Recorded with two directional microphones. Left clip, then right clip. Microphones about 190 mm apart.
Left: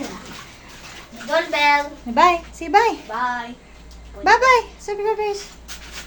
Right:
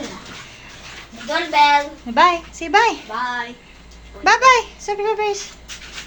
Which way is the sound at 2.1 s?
10° left (ahead or behind).